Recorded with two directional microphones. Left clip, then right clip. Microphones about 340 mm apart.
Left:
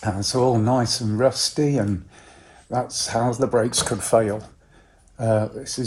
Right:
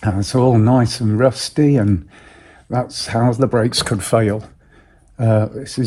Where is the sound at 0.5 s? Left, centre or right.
Centre.